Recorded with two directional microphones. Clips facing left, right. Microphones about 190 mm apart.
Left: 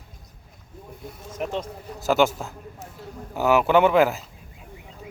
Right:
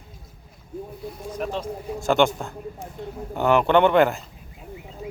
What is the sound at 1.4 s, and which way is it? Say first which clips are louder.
Speech: even; 15° left (ahead or behind).